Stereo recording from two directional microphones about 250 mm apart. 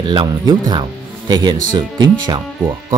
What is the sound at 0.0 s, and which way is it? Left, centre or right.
Speech, centre.